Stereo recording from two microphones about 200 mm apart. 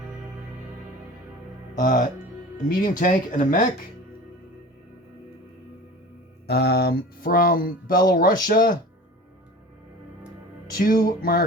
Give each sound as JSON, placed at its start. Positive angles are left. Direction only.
{"t": 1.7, "sound": "speech", "side_deg": 45}
{"t": 6.5, "sound": "speech", "side_deg": 55}
{"t": 10.8, "sound": "speech", "side_deg": 45}